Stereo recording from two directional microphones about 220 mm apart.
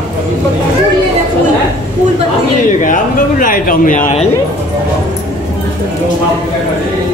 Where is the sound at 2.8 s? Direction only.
35° left (ahead or behind).